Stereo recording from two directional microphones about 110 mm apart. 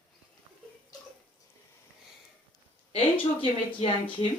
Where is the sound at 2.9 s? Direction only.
60° left (ahead or behind).